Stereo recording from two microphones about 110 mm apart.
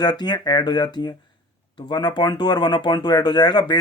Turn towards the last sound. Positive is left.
turn(degrees=40)  # may be behind; listen again after turning